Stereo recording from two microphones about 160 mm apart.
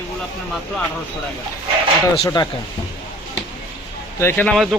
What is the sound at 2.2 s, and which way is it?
Speech, 25° left (ahead or behind).